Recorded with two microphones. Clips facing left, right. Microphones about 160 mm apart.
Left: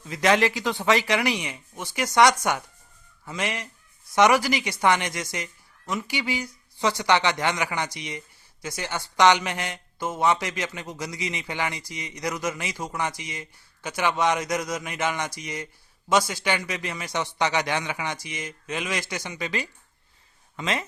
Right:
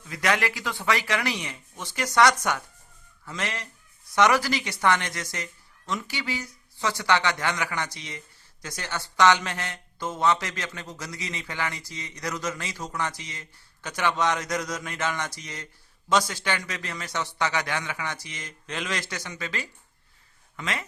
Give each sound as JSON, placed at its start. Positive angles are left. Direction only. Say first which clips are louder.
{"t": 0.1, "sound": "a man's voice", "louder": "left 5 dB", "side_deg": 25}